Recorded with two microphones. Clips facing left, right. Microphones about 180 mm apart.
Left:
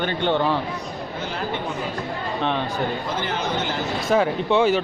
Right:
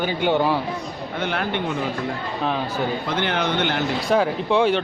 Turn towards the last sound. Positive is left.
turn(degrees=0)  # may be behind; listen again after turning